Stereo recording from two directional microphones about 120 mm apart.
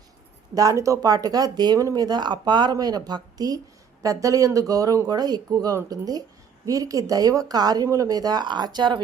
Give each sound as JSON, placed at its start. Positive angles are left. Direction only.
{"t": 0.5, "sound": "speech", "side_deg": -30}